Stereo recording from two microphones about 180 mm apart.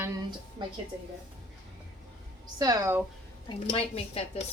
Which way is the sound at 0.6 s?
25° right (ahead or behind).